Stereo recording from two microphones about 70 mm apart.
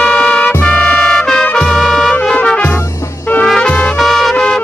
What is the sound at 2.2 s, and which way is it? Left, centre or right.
Music, centre.